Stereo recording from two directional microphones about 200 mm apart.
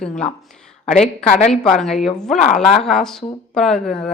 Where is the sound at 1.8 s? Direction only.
Centre (ahead or behind).